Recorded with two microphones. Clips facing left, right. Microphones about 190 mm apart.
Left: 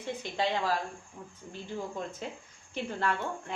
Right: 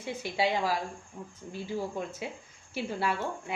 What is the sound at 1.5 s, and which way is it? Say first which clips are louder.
A woman's voice: right 3 dB; 5° right (ahead or behind).